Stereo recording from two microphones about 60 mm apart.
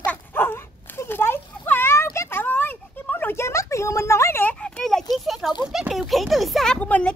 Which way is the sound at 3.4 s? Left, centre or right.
Left.